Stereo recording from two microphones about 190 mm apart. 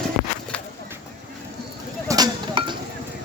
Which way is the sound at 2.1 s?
20° right (ahead or behind).